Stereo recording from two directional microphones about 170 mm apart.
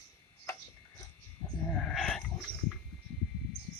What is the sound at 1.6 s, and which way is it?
Sheep, 5° left (ahead or behind).